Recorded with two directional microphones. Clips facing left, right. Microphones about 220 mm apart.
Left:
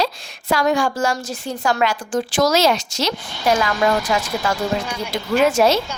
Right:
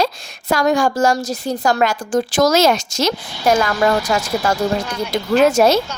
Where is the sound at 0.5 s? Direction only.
40° right (ahead or behind).